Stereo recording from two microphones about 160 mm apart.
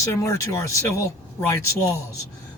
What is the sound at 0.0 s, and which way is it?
Speech, 20° left (ahead or behind).